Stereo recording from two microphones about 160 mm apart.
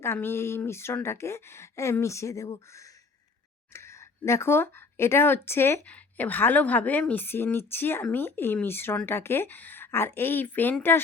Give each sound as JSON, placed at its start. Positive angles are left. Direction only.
{"t": 0.0, "sound": "speech", "side_deg": 15}